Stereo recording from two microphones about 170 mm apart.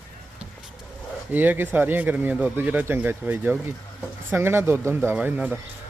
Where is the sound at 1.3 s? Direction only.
10° right (ahead or behind).